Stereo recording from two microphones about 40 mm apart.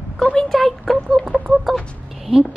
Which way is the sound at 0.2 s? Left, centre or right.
Left.